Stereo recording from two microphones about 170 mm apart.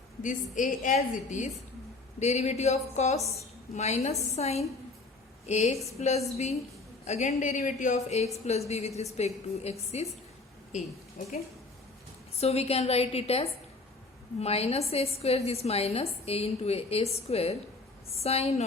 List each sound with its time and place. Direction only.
0.2 s a woman's voice: 50° left (ahead or behind)
12.4 s a woman's voice: 35° left (ahead or behind)